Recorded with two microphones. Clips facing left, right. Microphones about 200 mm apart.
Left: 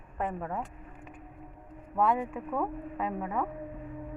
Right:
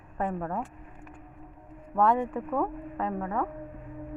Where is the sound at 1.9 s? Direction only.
5° left (ahead or behind).